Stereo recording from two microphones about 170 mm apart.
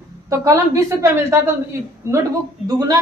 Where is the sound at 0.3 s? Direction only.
20° right (ahead or behind).